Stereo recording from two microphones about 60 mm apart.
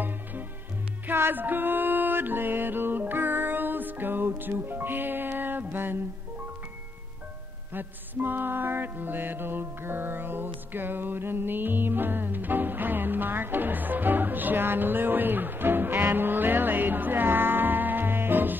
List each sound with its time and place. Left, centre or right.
1.0 s music: right
7.7 s music: right